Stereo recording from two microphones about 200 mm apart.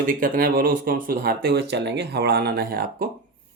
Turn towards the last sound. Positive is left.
turn(degrees=-50)  # may be behind; listen again after turning